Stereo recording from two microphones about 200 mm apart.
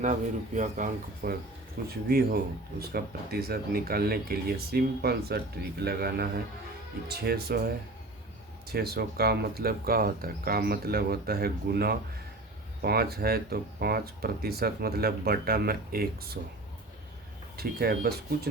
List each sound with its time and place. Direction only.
0.0 s speech: 40° right (ahead or behind)
8.7 s speech: 50° right (ahead or behind)
17.6 s speech: 50° right (ahead or behind)